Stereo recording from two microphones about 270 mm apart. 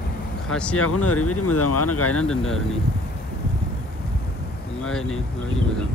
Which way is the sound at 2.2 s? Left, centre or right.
Centre.